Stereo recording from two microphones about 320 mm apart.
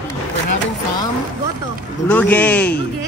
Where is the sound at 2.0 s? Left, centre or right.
Centre.